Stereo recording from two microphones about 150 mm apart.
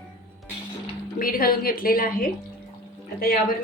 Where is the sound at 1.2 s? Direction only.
75° left (ahead or behind).